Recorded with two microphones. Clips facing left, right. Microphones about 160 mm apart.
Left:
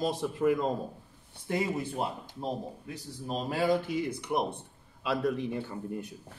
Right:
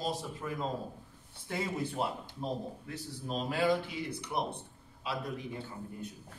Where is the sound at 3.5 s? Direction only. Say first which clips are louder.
Left 3 dB; 45° left (ahead or behind).